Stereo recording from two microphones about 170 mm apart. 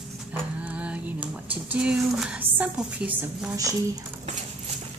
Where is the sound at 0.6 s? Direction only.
5° right (ahead or behind).